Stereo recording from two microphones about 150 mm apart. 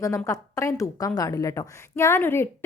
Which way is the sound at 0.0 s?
20° left (ahead or behind).